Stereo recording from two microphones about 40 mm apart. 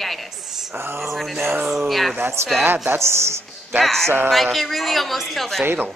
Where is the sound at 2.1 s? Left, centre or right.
Right.